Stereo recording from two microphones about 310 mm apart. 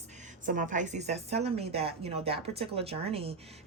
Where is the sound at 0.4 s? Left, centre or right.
Right.